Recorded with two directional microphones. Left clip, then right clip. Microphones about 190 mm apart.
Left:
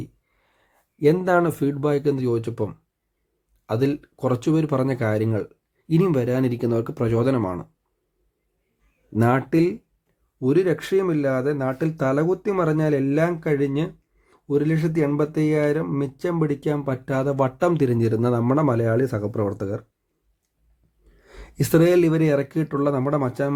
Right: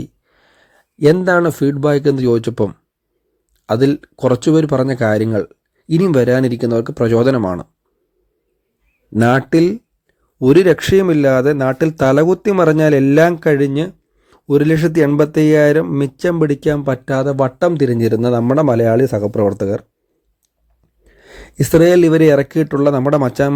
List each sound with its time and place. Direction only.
0.0 s speech: 30° right (ahead or behind)
9.5 s a man's voice: 30° right (ahead or behind)
21.0 s speech: 30° right (ahead or behind)